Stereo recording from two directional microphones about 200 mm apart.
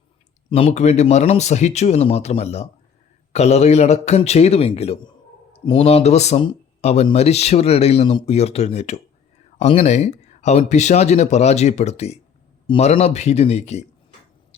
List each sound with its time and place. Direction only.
0.5 s speech: 30° left (ahead or behind)